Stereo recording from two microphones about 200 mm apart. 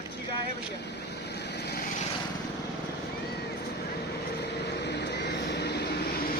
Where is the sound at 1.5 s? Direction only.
55° left (ahead or behind).